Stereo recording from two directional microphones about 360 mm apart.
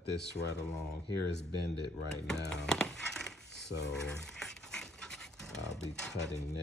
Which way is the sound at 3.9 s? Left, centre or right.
Centre.